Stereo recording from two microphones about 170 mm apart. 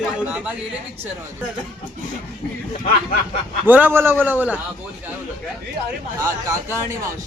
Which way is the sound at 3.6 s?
10° right (ahead or behind).